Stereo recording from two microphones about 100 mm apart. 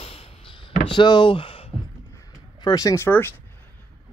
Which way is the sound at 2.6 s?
40° left (ahead or behind).